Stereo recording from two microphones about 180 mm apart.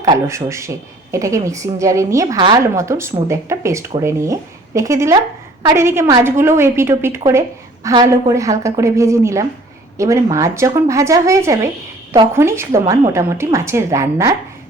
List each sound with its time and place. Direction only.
0.0 s speech: 20° right (ahead or behind)